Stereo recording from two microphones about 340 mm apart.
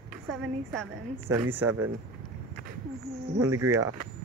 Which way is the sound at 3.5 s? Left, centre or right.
Right.